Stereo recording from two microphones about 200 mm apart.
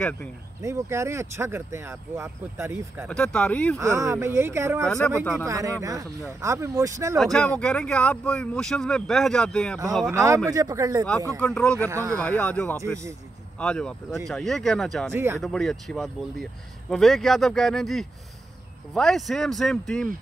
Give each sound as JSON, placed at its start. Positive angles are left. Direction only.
{"t": 0.6, "sound": "speech", "side_deg": -15}
{"t": 3.1, "sound": "speech", "side_deg": 5}
{"t": 3.7, "sound": "speech", "side_deg": -15}
{"t": 5.0, "sound": "speech", "side_deg": 5}
{"t": 5.4, "sound": "speech", "side_deg": -15}
{"t": 7.3, "sound": "speech", "side_deg": 5}
{"t": 10.1, "sound": "speech", "side_deg": -15}
{"t": 11.3, "sound": "speech", "side_deg": 5}
{"t": 11.9, "sound": "speech", "side_deg": -15}
{"t": 12.2, "sound": "speech", "side_deg": 5}